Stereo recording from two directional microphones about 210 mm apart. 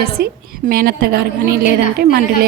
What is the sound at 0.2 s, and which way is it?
A woman's voice, 50° right (ahead or behind).